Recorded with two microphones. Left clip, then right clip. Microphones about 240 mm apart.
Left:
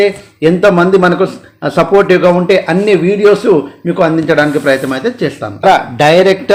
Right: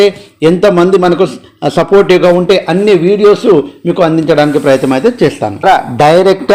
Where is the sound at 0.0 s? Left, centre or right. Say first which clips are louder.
Right 2 dB; centre.